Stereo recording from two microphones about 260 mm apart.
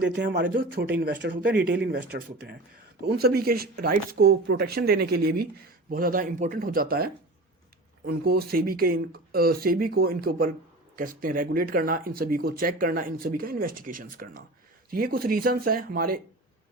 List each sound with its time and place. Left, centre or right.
0.0 s speech: right